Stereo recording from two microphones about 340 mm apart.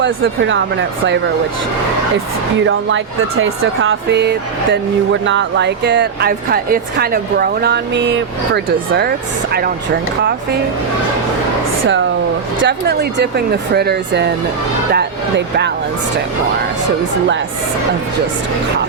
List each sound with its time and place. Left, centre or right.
0.0 s speech: right
2.6 s speech: right
12.6 s speech: right